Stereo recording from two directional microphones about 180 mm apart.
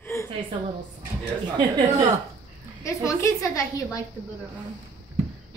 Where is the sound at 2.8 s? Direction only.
15° left (ahead or behind).